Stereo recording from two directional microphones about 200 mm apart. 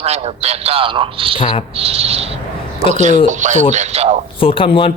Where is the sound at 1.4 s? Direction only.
25° left (ahead or behind).